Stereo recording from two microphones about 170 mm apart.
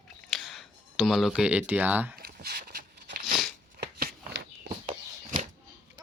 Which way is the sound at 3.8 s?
70° right (ahead or behind).